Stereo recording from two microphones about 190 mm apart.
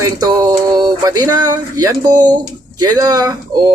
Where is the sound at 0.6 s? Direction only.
20° right (ahead or behind).